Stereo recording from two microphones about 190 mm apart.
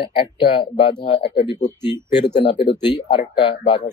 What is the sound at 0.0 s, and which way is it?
Speech, 25° left (ahead or behind).